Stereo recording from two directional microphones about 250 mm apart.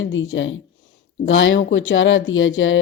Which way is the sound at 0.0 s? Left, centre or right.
Left.